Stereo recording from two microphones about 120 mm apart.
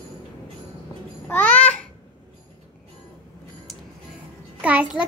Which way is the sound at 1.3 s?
10° left (ahead or behind).